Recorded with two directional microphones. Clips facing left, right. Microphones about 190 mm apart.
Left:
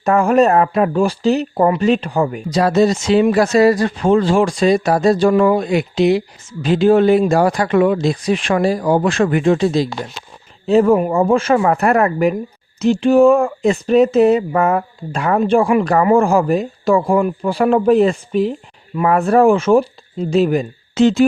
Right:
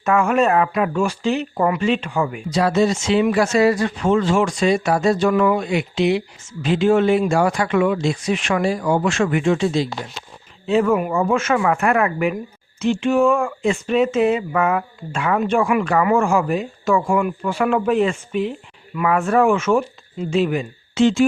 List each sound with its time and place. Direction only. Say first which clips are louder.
0.0 s speech: left 4 dB; 35° left (ahead or behind)